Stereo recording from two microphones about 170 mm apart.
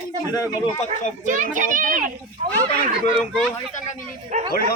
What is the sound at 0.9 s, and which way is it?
A child's voice, 50° right (ahead or behind).